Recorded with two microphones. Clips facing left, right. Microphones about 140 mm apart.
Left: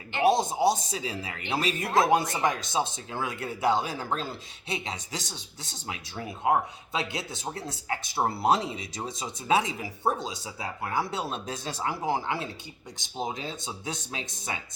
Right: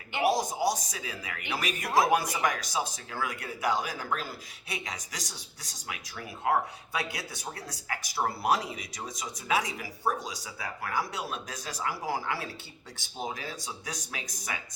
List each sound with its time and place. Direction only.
0.2 s speech: 25° left (ahead or behind)